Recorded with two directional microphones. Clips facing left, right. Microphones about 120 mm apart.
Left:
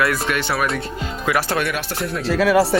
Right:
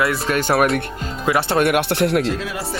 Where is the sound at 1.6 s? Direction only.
60° right (ahead or behind).